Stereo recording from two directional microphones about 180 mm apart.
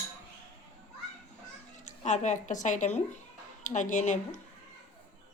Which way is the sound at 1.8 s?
40° left (ahead or behind).